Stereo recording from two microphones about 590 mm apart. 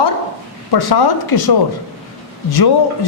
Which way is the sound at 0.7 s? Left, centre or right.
Left.